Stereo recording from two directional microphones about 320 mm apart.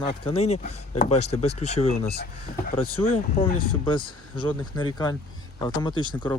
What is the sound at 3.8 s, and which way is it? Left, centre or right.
Speech, centre.